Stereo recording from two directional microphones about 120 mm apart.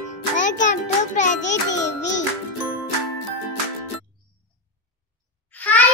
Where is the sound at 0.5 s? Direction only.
90° left.